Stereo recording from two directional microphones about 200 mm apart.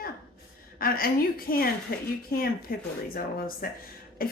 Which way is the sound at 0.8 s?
50° left (ahead or behind).